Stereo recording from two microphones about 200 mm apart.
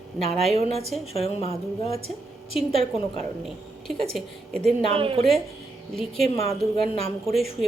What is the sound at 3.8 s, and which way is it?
Speech, centre (ahead or behind).